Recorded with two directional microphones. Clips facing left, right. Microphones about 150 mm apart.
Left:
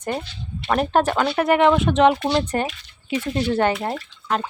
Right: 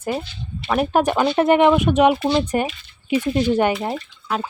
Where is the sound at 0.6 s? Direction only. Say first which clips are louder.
Right 1 dB; 5° right (ahead or behind).